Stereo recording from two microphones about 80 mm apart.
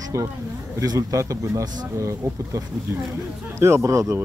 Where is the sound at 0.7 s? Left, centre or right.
Right.